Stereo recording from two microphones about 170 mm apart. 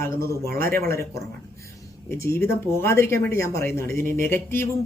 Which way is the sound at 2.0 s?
15° left (ahead or behind).